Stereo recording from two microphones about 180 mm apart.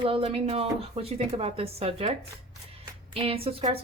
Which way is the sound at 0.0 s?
30° right (ahead or behind).